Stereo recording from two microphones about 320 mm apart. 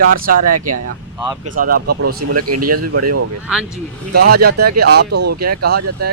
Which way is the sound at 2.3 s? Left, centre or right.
Right.